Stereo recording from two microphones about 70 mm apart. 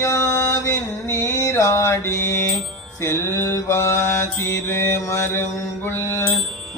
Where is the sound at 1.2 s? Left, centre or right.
Left.